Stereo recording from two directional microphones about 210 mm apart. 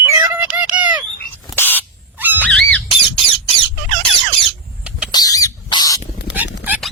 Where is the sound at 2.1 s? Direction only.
10° right (ahead or behind).